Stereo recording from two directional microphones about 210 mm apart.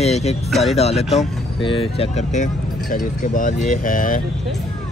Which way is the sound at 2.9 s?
40° left (ahead or behind).